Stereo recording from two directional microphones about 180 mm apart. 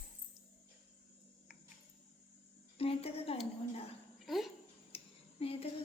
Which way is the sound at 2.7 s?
30° left (ahead or behind).